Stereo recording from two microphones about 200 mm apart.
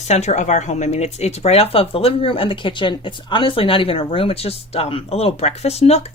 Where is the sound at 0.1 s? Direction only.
35° left (ahead or behind).